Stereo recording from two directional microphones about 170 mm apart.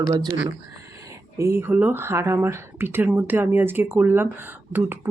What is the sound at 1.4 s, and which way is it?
Speech, 15° right (ahead or behind).